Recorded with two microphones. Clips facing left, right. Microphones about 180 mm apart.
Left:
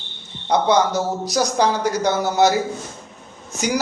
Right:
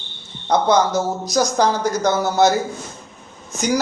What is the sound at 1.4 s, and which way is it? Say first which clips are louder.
Speech: right 1 dB; 40° right (ahead or behind).